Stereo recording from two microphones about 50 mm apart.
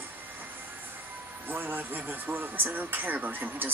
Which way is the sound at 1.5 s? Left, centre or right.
Right.